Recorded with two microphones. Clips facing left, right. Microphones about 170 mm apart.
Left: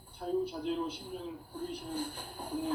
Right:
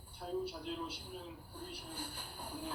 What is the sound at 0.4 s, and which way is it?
Speech, 50° left (ahead or behind).